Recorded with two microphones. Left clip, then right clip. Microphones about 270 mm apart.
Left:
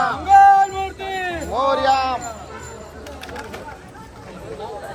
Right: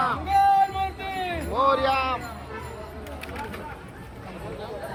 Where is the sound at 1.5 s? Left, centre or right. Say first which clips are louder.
Left 4 dB; left.